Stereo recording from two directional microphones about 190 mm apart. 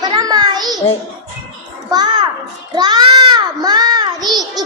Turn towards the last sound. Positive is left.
turn(degrees=-20)  # may be behind; listen again after turning